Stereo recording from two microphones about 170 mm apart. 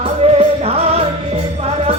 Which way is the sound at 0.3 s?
35° right (ahead or behind).